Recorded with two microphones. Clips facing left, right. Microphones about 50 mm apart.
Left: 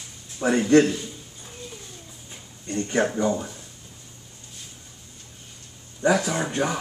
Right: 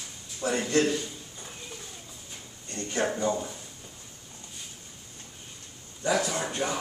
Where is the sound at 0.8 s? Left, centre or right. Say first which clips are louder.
Left 2 dB; centre.